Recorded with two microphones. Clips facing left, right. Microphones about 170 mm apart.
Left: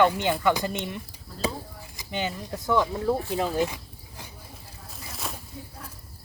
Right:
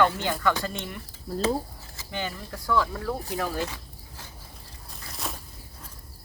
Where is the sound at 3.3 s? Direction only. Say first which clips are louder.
Left 4 dB; 20° left (ahead or behind).